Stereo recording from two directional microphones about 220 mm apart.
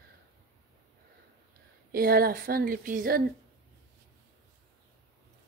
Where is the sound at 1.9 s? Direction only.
40° right (ahead or behind).